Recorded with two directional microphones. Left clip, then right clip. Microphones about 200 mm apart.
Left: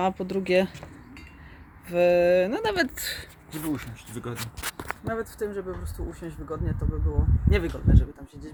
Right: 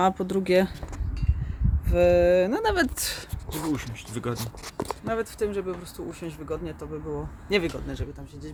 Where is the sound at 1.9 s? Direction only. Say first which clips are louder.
Right 1 dB; 10° right (ahead or behind).